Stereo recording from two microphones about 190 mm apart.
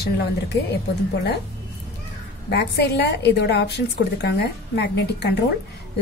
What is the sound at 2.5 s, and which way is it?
A woman's voice, 60° left (ahead or behind).